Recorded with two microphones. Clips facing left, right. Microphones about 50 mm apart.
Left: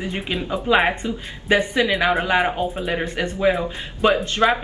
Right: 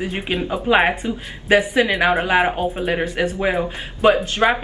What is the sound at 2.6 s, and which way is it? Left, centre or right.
A woman's voice, centre.